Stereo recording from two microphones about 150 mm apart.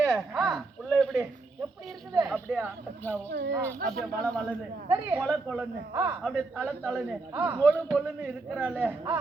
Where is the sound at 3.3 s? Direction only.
90° right.